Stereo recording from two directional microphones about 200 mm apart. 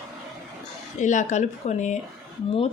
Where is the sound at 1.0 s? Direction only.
35° left (ahead or behind).